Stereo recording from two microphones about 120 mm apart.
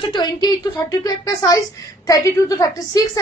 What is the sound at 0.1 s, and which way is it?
A woman's voice, 35° left (ahead or behind).